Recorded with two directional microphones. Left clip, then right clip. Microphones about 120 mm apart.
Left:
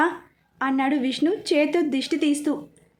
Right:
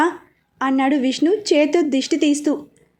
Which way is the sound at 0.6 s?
20° right (ahead or behind).